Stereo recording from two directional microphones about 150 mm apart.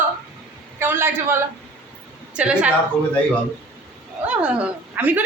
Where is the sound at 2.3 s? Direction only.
5° right (ahead or behind).